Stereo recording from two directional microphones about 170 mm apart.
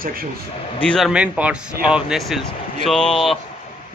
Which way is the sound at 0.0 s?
60° right (ahead or behind).